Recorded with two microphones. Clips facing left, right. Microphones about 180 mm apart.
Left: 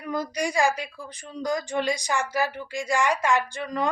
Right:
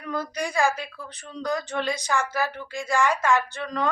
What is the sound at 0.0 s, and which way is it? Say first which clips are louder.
A woman's voice: left 2 dB; 10° left (ahead or behind).